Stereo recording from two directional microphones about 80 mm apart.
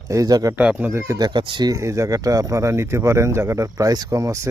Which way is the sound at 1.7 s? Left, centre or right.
Right.